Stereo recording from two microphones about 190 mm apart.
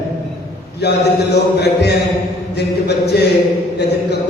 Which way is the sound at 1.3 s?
60° left (ahead or behind).